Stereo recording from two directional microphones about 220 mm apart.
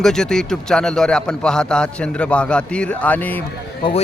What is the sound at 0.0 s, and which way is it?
A man's voice, 5° left (ahead or behind).